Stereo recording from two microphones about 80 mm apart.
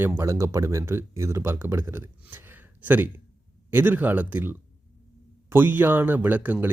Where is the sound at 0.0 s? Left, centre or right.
Right.